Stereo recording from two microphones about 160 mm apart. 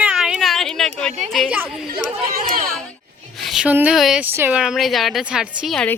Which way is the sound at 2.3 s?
60° right (ahead or behind).